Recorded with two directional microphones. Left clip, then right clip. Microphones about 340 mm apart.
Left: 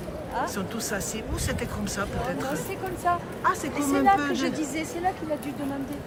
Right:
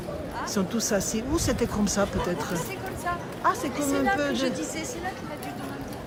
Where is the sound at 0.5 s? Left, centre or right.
Centre.